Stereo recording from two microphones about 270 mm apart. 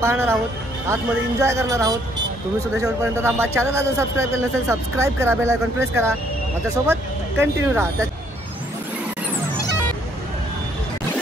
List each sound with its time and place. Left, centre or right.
0.0 s a man's voice: centre